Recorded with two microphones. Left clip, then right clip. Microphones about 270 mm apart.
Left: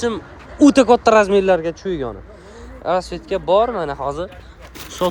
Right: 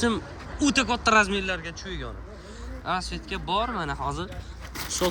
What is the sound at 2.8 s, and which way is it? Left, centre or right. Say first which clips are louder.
Speech: left 10 dB; centre.